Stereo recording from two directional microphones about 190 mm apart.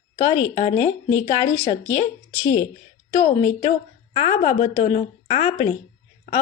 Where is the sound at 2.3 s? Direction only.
15° left (ahead or behind).